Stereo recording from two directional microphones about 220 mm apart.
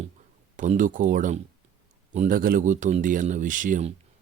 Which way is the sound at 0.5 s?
35° right (ahead or behind).